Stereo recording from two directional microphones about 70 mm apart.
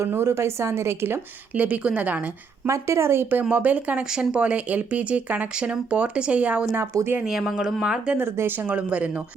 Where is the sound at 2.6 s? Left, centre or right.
Right; by 6.7 s centre.